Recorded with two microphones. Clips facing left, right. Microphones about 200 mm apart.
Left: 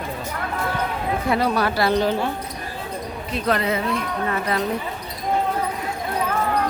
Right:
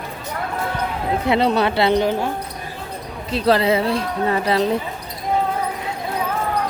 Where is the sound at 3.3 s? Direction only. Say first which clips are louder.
Right 6 dB; 30° right (ahead or behind).